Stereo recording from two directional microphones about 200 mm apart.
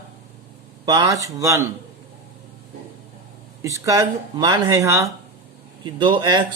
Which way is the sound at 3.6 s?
15° right (ahead or behind).